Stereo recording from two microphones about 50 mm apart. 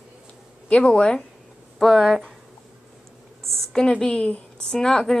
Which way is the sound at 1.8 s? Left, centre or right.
Centre.